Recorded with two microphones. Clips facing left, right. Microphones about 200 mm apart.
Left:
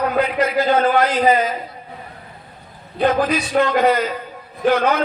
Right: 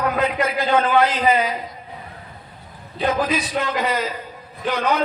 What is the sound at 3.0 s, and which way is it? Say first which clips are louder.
A man's voice: left 4 dB; 50° left (ahead or behind).